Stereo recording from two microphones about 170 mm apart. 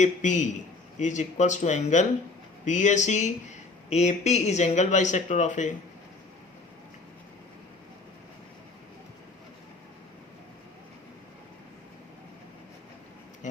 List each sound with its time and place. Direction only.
0.0 s speech: 45° left (ahead or behind)
13.4 s music: 45° left (ahead or behind)